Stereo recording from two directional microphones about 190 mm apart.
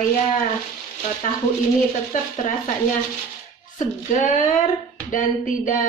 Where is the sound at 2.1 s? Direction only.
45° left (ahead or behind).